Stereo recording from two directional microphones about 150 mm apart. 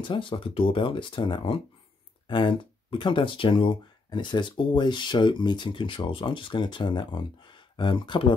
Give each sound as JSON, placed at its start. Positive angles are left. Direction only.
{"t": 0.0, "sound": "speech", "side_deg": 30}